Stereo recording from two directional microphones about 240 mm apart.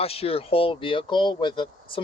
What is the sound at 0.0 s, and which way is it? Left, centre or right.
Speech, left.